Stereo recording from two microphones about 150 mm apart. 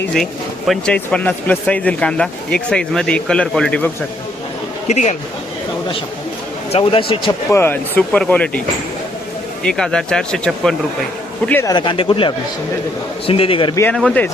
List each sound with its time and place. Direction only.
0.7 s speech: 5° left (ahead or behind)
4.9 s speech: 50° left (ahead or behind)
6.7 s speech: 40° left (ahead or behind)
7.5 s speech: 15° left (ahead or behind)
9.6 s speech: 5° left (ahead or behind)
11.6 s speech: 30° left (ahead or behind)
13.9 s speech: 5° left (ahead or behind)